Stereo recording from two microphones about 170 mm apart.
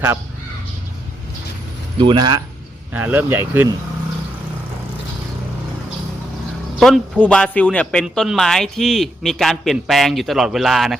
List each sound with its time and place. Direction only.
2.0 s speech: 30° right (ahead or behind)
2.9 s speech: 10° right (ahead or behind)
6.7 s speech: centre (ahead or behind)